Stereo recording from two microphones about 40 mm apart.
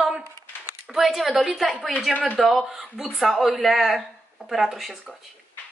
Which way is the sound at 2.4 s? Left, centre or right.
Centre.